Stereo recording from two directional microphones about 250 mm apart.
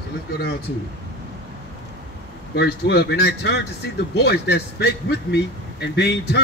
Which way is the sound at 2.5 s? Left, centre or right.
Left.